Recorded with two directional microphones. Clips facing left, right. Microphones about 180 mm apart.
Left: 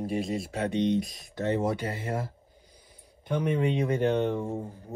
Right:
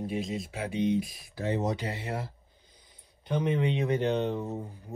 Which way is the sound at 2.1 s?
45° left (ahead or behind).